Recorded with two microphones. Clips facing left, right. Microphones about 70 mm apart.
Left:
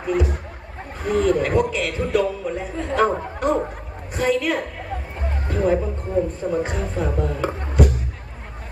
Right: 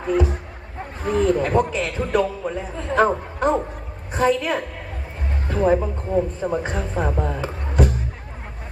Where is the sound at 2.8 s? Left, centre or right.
Right.